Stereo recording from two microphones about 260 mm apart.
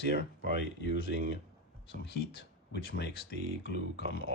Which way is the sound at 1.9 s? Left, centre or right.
Left.